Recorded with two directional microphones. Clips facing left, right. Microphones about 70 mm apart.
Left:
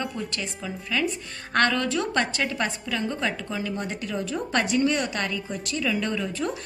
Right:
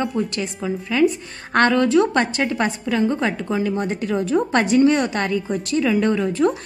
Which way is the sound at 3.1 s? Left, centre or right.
Right.